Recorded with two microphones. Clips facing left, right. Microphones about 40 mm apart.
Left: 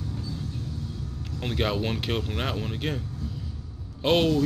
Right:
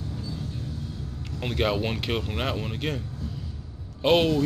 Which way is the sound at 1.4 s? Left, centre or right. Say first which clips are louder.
Right 2 dB; centre.